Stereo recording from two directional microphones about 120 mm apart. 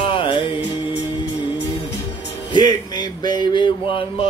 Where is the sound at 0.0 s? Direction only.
45° left (ahead or behind).